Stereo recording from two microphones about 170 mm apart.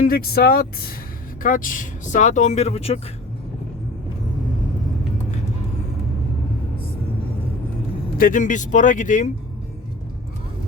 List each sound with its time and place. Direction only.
0.0 s speech: 60° left (ahead or behind); by 3.0 s 35° left (ahead or behind)
8.2 s speech: 50° left (ahead or behind)